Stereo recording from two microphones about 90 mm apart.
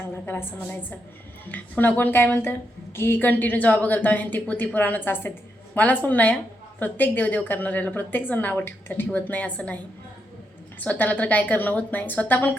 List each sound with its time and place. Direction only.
0.3 s a woman's voice: 20° left (ahead or behind)
10.8 s a woman's voice: 20° left (ahead or behind)